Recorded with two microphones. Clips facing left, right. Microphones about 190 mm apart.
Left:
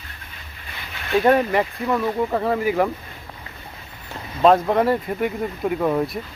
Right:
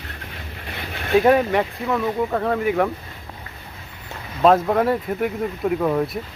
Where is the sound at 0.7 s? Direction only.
50° right (ahead or behind).